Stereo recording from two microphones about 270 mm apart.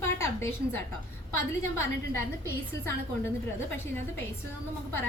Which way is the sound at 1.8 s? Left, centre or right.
Centre.